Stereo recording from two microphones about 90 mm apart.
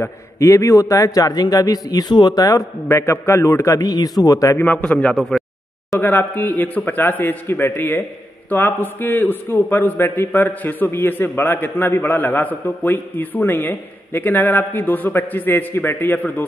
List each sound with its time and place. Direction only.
0.0 s a man's voice: 35° left (ahead or behind)
2.9 s a man's voice: 30° left (ahead or behind)
4.6 s a man's voice: 15° left (ahead or behind)
5.3 s a sound: 10° left (ahead or behind)
5.9 s a man's voice: 20° left (ahead or behind)